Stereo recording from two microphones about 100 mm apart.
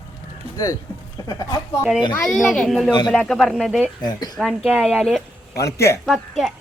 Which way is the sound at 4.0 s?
40° left (ahead or behind).